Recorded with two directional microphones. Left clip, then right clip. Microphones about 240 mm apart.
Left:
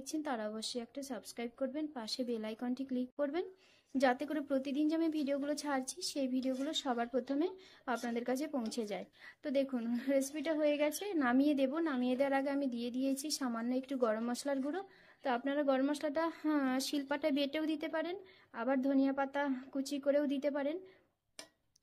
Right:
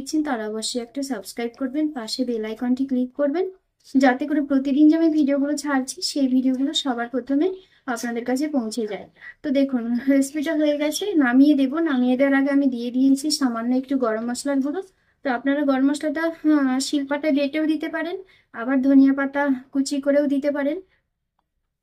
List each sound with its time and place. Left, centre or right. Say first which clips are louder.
0.2 s speech: right 12 dB; left